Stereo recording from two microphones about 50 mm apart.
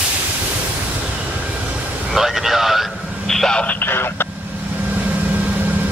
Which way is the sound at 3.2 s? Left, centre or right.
Centre.